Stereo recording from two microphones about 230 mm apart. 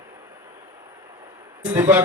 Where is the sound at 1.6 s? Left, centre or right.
Centre.